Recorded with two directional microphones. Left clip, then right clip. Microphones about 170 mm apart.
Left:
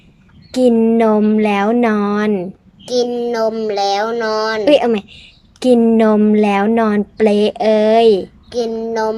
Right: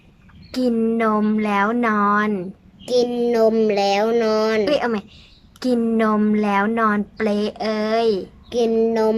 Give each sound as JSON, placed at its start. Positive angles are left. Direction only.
{"t": 0.5, "sound": "a woman's voice", "side_deg": 20}
{"t": 2.8, "sound": "speech", "side_deg": -10}
{"t": 4.6, "sound": "a woman's voice", "side_deg": 20}
{"t": 8.4, "sound": "child singing", "side_deg": -10}
{"t": 8.8, "sound": "speech", "side_deg": -10}